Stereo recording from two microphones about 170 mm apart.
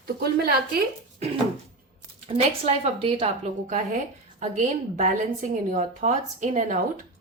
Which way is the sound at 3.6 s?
50° right (ahead or behind).